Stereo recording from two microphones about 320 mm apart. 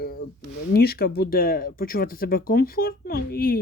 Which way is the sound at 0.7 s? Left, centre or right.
Left.